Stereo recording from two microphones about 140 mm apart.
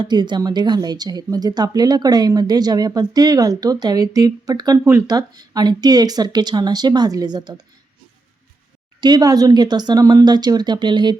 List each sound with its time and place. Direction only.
0.0 s speech: 30° right (ahead or behind)
9.0 s speech: 30° right (ahead or behind)